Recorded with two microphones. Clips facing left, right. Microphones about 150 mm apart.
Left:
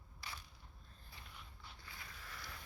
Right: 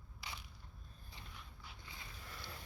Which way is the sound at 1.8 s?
20° right (ahead or behind).